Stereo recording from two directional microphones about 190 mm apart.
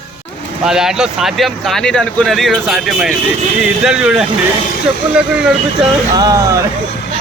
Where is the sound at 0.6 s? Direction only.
5° right (ahead or behind).